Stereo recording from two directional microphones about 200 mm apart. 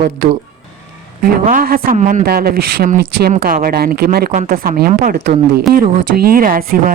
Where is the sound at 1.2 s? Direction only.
45° right (ahead or behind).